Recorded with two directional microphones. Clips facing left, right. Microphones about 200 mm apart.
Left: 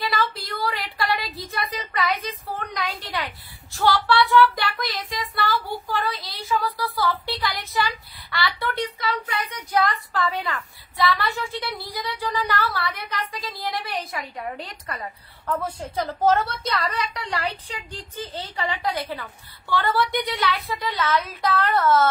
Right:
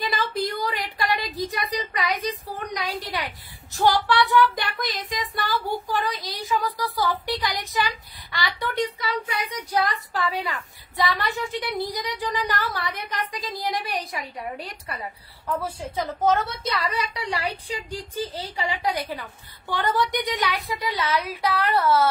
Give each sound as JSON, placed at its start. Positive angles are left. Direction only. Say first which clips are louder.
{"t": 0.5, "sound": "a child's voice", "louder": "even", "side_deg": -20}
{"t": 10.4, "sound": "a child's voice", "louder": "left 1 dB", "side_deg": -15}